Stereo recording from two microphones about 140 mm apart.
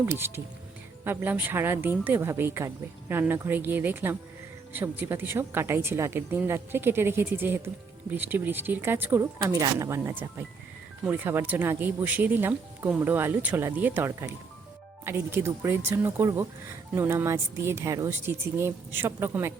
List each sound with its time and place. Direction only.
0.0 s speech: 15° right (ahead or behind)